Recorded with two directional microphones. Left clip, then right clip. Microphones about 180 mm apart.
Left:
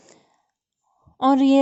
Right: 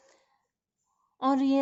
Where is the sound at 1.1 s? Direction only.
45° left (ahead or behind).